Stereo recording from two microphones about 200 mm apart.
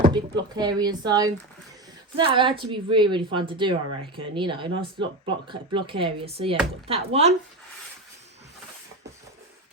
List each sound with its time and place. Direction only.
0.0 s speech: 20° right (ahead or behind)